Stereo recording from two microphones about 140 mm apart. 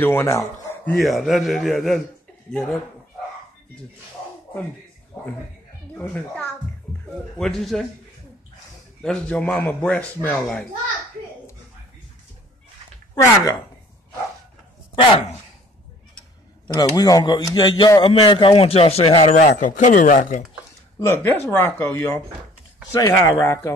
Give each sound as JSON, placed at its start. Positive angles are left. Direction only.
{"t": 0.0, "sound": "speech", "side_deg": 15}
{"t": 1.0, "sound": "a man's voice", "side_deg": 0}
{"t": 5.9, "sound": "a man's voice", "side_deg": 10}
{"t": 9.0, "sound": "speech", "side_deg": 5}
{"t": 13.1, "sound": "speech", "side_deg": 25}
{"t": 16.6, "sound": "a man's voice", "side_deg": 30}
{"t": 21.0, "sound": "speech", "side_deg": 15}